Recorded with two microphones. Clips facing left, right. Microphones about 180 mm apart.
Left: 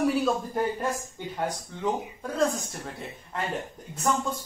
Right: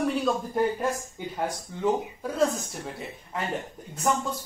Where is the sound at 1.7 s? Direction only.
5° right (ahead or behind).